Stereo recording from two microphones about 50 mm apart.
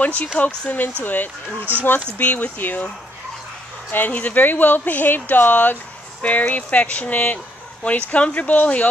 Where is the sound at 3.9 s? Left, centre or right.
Left.